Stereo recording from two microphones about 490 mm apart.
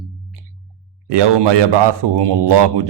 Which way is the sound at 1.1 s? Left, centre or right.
Right.